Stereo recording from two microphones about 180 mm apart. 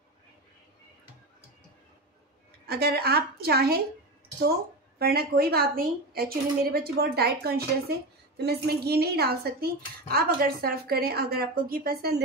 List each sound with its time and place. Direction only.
2.6 s speech: 60° right (ahead or behind)